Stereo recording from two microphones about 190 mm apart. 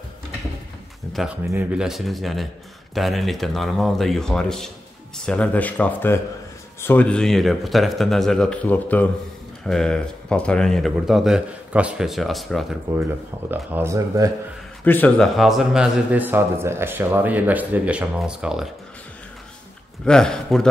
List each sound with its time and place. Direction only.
1.1 s speech: 5° right (ahead or behind)
12.9 s a man's voice: 10° right (ahead or behind)
14.9 s a man's voice: 5° left (ahead or behind)
20.1 s speech: 5° left (ahead or behind)